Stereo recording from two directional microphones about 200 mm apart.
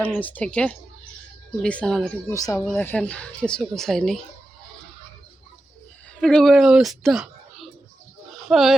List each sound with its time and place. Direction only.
0.0 s speech: 10° left (ahead or behind)
2.3 s speech: 15° left (ahead or behind)
6.1 s speech: 5° left (ahead or behind)
8.3 s a sound: centre (ahead or behind)